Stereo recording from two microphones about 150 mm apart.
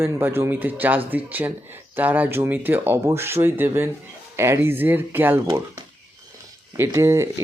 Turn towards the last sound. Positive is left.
turn(degrees=-20)  # may be behind; listen again after turning